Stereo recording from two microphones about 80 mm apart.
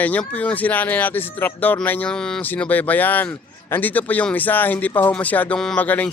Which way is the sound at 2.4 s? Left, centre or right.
Left.